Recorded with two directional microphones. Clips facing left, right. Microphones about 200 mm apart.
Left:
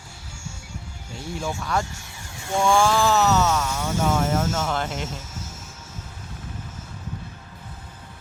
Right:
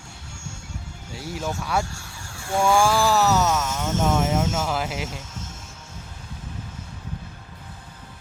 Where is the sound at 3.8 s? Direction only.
10° left (ahead or behind).